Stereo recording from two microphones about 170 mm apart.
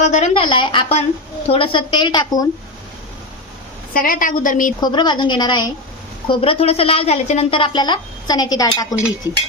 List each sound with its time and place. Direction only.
0.0 s a sound: 45° left (ahead or behind)
0.3 s a woman's voice: 30° left (ahead or behind)
3.9 s a woman's voice: 55° left (ahead or behind)
4.8 s a woman's voice: 25° left (ahead or behind)